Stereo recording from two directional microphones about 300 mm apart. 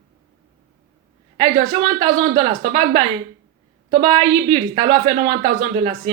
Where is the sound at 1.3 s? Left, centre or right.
Centre.